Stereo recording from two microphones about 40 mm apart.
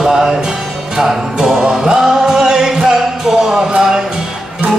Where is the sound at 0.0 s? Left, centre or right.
Centre.